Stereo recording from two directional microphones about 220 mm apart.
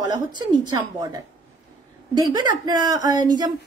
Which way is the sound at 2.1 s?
20° right (ahead or behind).